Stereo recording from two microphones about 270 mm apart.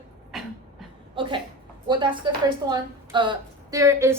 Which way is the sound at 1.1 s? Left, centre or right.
Centre.